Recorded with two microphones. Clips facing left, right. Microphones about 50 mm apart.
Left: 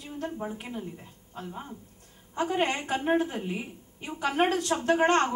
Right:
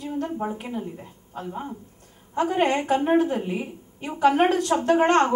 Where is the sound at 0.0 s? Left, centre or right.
Centre.